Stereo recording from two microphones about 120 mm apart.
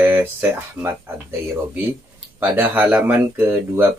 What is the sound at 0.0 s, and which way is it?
Speech, 15° right (ahead or behind).